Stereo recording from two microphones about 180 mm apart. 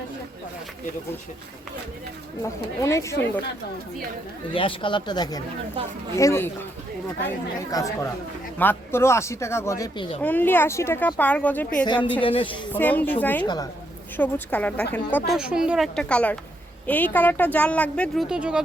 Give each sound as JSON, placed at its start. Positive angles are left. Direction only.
{"t": 2.4, "sound": "speech", "side_deg": 15}
{"t": 4.5, "sound": "speech", "side_deg": 30}
{"t": 7.7, "sound": "speech", "side_deg": 20}
{"t": 11.9, "sound": "speech", "side_deg": 25}
{"t": 12.7, "sound": "speech", "side_deg": 10}
{"t": 13.4, "sound": "speech", "side_deg": 25}
{"t": 14.2, "sound": "speech", "side_deg": 10}
{"t": 15.3, "sound": "a woman's voice", "side_deg": -5}
{"t": 18.3, "sound": "a woman's voice", "side_deg": -5}